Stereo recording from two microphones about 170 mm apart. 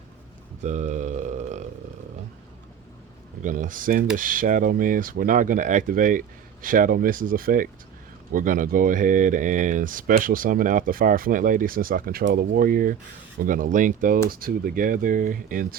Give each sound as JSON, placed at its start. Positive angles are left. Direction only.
{"t": 0.6, "sound": "burping", "side_deg": -45}
{"t": 3.4, "sound": "speech", "side_deg": -50}